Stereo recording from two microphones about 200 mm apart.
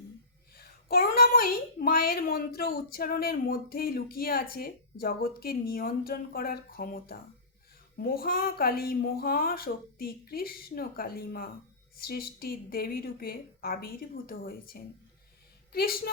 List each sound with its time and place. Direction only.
0.5 s a child's voice: 50° left (ahead or behind)